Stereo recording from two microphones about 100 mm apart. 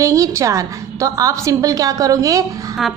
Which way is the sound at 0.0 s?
35° right (ahead or behind).